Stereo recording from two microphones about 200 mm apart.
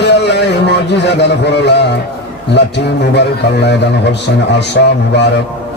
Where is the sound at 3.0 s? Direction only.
55° left (ahead or behind).